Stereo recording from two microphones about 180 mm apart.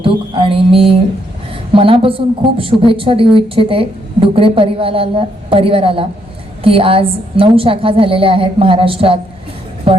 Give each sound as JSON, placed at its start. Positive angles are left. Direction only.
{"t": 0.0, "sound": "mantra", "side_deg": -30}
{"t": 1.7, "sound": "a woman's voice", "side_deg": -30}